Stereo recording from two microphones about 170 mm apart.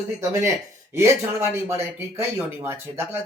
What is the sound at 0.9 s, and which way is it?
Speech, 15° right (ahead or behind).